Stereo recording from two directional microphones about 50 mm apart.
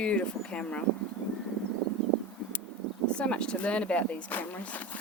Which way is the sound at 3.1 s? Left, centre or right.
Left.